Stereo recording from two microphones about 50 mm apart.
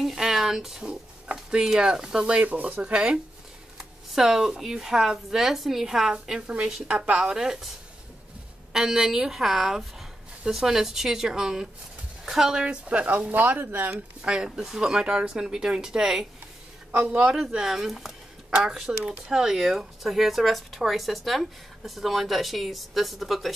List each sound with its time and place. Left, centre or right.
0.0 s a sound: centre
1.5 s a woman's voice: centre
2.4 s speech: right
2.8 s speech: centre
3.7 s a woman's voice: centre
8.7 s a woman's voice: centre
12.6 s speech: right
13.3 s speech: right
14.2 s a woman's voice: centre
16.9 s speech: right
17.6 s a woman's voice: centre